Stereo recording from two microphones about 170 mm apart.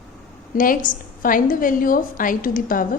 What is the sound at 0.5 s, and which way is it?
A woman's voice, 55° left (ahead or behind).